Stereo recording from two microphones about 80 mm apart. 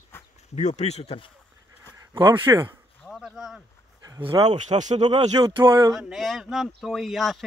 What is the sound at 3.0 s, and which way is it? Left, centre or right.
Speech, centre.